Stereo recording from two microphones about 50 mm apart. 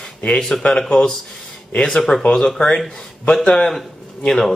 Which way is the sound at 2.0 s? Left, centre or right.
Centre.